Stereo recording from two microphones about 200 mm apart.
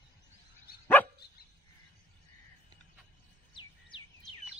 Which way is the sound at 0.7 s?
50° left (ahead or behind).